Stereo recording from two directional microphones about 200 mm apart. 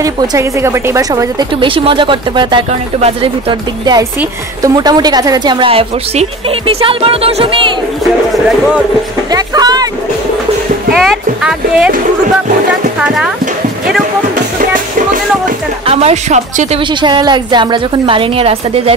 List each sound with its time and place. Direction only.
0.0 s speech: 15° right (ahead or behind)
9.3 s speech: 20° right (ahead or behind)
11.0 s speech: centre (ahead or behind)
13.0 s speech: 5° right (ahead or behind)
15.9 s speech: 30° right (ahead or behind)
17.0 s speech: 25° right (ahead or behind)